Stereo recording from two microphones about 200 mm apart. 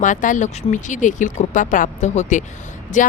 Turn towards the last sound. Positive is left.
turn(degrees=40)  # may be behind; listen again after turning